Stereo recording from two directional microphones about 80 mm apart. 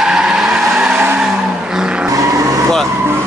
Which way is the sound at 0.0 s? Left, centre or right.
Centre.